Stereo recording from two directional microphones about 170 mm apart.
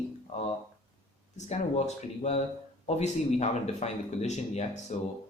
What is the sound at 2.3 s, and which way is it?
Speech, 45° left (ahead or behind).